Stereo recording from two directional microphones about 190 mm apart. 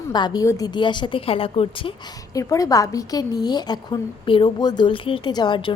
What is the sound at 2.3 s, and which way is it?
A woman's voice, 15° left (ahead or behind).